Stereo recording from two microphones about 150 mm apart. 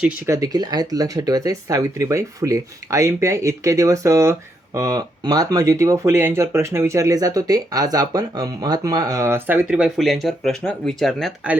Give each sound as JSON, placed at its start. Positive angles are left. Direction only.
{"t": 0.3, "sound": "speech", "side_deg": -25}